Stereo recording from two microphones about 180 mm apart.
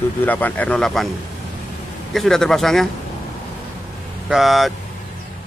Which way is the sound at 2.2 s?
Centre (ahead or behind).